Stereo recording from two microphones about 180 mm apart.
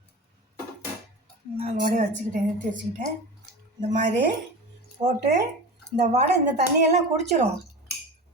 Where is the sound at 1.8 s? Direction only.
50° right (ahead or behind).